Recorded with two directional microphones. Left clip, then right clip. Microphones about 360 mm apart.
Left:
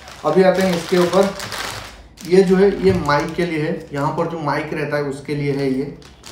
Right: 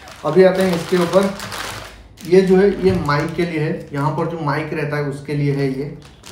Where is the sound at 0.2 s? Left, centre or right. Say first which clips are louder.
Right 2 dB; centre.